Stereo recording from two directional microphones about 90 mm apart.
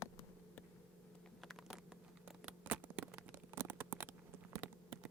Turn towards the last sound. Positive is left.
turn(degrees=-15)  # may be behind; listen again after turning